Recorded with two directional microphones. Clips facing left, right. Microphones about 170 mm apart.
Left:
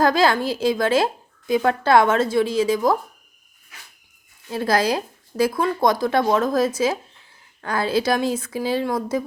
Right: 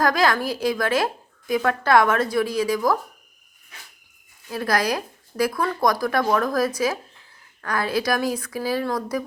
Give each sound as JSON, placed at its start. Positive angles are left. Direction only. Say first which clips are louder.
{"t": 0.0, "sound": "a woman's voice", "louder": "left 3 dB", "side_deg": 25}
{"t": 4.5, "sound": "a woman's voice", "louder": "left 3 dB", "side_deg": 25}